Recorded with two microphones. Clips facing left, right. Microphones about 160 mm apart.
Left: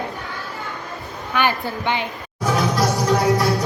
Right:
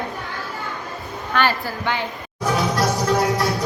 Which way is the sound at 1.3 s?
15° left (ahead or behind).